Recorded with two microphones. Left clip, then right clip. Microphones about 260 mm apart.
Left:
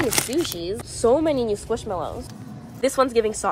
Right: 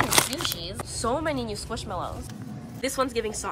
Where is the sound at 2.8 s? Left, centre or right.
Centre.